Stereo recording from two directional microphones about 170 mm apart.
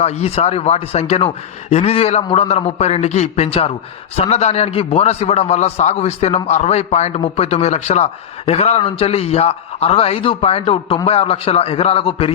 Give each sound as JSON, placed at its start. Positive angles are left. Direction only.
{"t": 0.0, "sound": "a man's voice", "side_deg": 40}